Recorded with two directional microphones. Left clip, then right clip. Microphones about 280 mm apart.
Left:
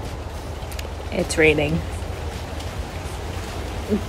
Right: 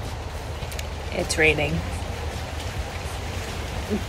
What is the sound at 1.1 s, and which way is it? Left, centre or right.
Speech, centre.